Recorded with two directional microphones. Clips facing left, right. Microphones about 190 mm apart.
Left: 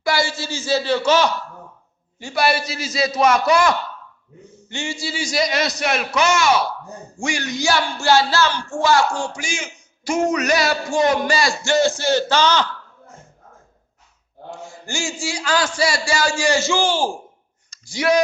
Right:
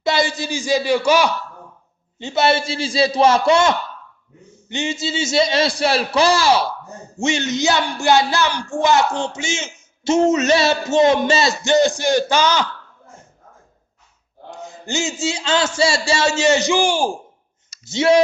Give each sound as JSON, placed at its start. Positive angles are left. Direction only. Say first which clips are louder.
{"t": 0.0, "sound": "a man's voice", "louder": "right 2 dB", "side_deg": -20}
{"t": 2.1, "sound": "speech", "louder": "right 3 dB", "side_deg": -25}
{"t": 14.5, "sound": "speech", "louder": "right 5 dB", "side_deg": -20}
{"t": 17.8, "sound": "speech", "louder": "right 4 dB", "side_deg": -25}